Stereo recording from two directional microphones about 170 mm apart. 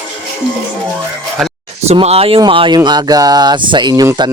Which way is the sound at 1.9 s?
35° right (ahead or behind).